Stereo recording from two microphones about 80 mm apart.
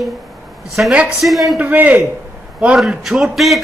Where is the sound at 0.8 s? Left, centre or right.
Right.